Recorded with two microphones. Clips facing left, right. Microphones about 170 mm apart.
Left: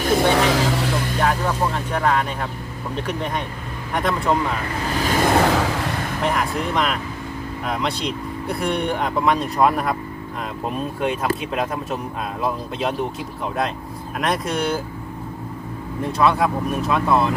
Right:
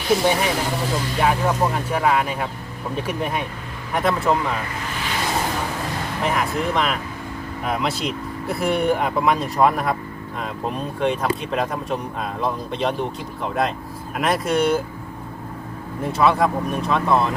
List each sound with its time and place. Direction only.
0.3 s speech: 90° left
1.2 s speech: 5° right (ahead or behind)
5.0 s a sound: 45° left (ahead or behind)
5.3 s vehicle: 75° left (ahead or behind)
6.2 s speech: centre (ahead or behind)
11.0 s speech: 5° left (ahead or behind)
16.1 s speech: centre (ahead or behind)